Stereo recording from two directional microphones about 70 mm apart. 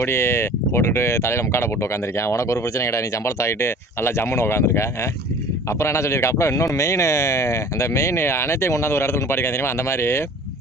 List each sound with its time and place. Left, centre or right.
0.0 s speech: left